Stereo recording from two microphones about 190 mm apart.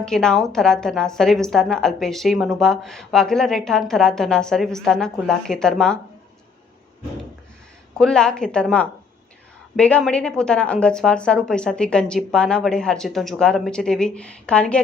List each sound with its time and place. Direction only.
0.0 s a woman's voice: 5° left (ahead or behind)
7.9 s a woman's voice: 5° left (ahead or behind)